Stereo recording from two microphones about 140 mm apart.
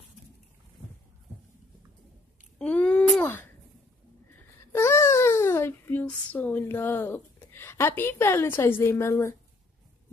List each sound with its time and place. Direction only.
2.6 s a sound: 5° left (ahead or behind)
4.7 s babbling: 20° left (ahead or behind)
7.5 s a woman's voice: 20° left (ahead or behind)